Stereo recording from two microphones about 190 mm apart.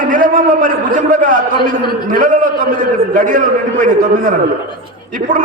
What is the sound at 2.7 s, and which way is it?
A man's voice, 45° right (ahead or behind).